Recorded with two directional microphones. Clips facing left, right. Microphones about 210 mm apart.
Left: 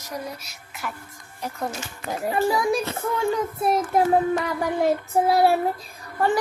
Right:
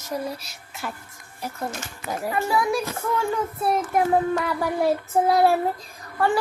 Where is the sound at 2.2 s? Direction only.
25° left (ahead or behind).